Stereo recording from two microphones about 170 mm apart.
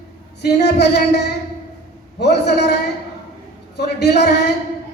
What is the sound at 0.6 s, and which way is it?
A woman's voice, 80° left.